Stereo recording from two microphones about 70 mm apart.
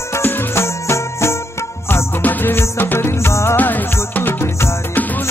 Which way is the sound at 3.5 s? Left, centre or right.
Left.